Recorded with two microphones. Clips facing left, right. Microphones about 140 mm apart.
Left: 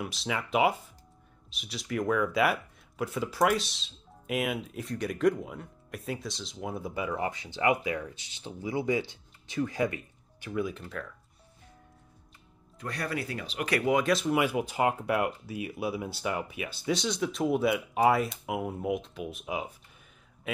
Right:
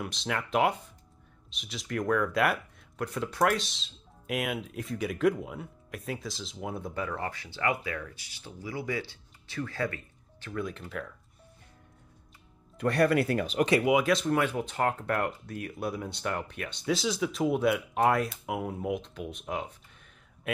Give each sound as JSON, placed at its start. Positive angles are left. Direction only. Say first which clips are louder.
{"t": 0.0, "sound": "speech", "louder": "even", "side_deg": 0}
{"t": 12.7, "sound": "speech", "louder": "right 10 dB", "side_deg": -60}
{"t": 13.8, "sound": "speech", "louder": "right 1 dB", "side_deg": -5}